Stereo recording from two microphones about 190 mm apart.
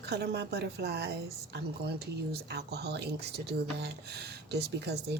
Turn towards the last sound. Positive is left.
turn(degrees=-60)  # may be behind; listen again after turning